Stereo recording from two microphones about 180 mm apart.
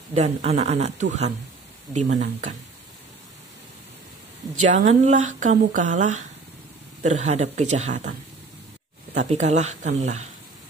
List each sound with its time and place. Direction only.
0.1 s speech: 35° right (ahead or behind)
4.6 s speech: 40° right (ahead or behind)